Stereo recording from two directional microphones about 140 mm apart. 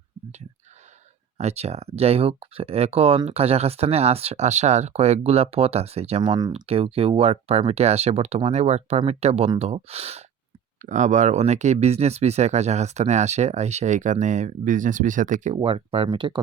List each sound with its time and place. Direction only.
1.4 s speech: 50° right (ahead or behind)
10.8 s speech: 60° right (ahead or behind)
15.5 s speech: 40° right (ahead or behind)